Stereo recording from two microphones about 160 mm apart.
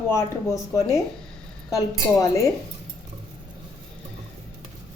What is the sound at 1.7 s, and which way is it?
Speech, 20° left (ahead or behind).